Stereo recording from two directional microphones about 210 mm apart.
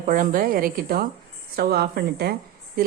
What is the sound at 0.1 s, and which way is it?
A woman's voice, 40° right (ahead or behind).